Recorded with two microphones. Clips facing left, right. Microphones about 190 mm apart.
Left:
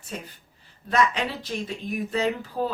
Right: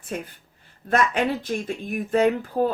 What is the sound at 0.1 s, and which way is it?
Speech, 55° right (ahead or behind).